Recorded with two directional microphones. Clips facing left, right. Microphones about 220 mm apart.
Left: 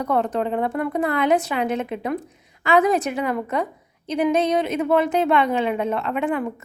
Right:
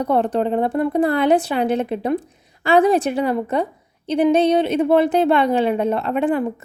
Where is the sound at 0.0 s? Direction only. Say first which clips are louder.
Right 4 dB; 30° right (ahead or behind).